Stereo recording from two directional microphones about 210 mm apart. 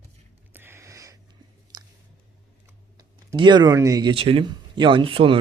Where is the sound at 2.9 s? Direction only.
20° right (ahead or behind).